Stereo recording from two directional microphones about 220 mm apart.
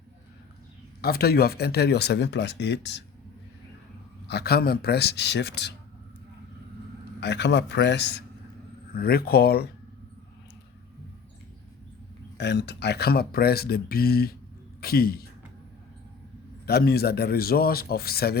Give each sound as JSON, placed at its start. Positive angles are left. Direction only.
{"t": 1.0, "sound": "speech", "side_deg": 45}
{"t": 4.3, "sound": "speech", "side_deg": 45}
{"t": 7.2, "sound": "speech", "side_deg": 50}
{"t": 12.4, "sound": "a man's voice", "side_deg": 50}
{"t": 16.6, "sound": "speech", "side_deg": 45}